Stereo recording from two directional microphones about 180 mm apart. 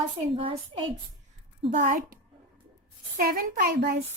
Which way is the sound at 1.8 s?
50° right (ahead or behind).